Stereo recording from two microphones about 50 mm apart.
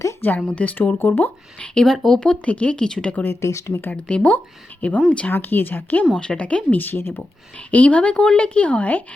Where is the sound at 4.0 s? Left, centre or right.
Left.